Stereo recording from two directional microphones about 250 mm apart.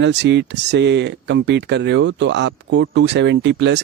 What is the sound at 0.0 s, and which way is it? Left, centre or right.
Speech, right.